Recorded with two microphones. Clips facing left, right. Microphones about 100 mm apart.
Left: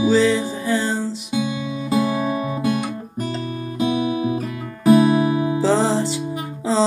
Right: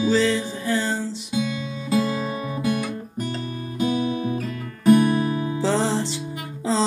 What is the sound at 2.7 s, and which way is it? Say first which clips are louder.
Guitar: left 2 dB; 30° left (ahead or behind).